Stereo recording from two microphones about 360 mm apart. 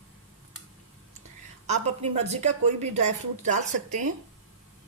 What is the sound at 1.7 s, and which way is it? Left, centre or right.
A woman's voice, centre.